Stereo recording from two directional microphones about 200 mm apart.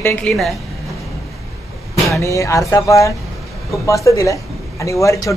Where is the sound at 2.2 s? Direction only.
15° left (ahead or behind).